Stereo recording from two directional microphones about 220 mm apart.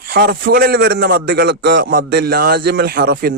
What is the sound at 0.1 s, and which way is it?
A man's voice, 45° right (ahead or behind).